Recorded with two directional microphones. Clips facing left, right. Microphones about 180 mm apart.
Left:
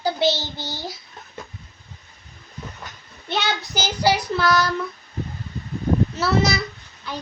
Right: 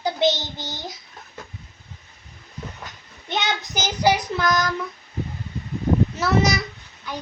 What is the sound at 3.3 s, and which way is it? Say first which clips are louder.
Child singing: left 1 dB; 20° right (ahead or behind).